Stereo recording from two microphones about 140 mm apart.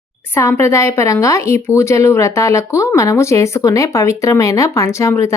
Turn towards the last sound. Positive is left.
turn(degrees=20)  # may be behind; listen again after turning